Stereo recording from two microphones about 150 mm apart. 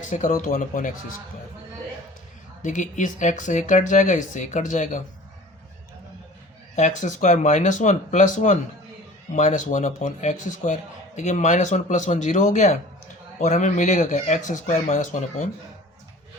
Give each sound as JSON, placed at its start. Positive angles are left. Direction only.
{"t": 0.0, "sound": "speech", "side_deg": 55}
{"t": 2.6, "sound": "speech", "side_deg": 55}
{"t": 6.7, "sound": "a man's voice", "side_deg": 55}